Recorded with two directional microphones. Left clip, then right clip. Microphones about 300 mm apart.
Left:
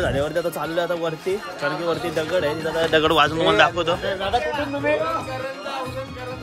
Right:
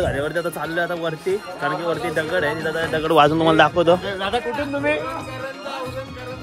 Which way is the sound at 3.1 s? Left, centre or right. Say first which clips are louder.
Right 3 dB; centre.